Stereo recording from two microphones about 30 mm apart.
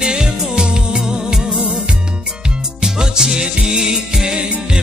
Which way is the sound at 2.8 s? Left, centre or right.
Centre.